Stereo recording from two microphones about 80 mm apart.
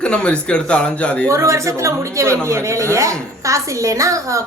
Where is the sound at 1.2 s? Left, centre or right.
Right.